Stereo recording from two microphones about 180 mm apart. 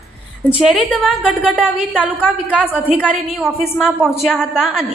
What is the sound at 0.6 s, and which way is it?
A woman's voice, centre (ahead or behind).